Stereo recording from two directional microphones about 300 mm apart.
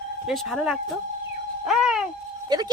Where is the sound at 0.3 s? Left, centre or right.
Centre.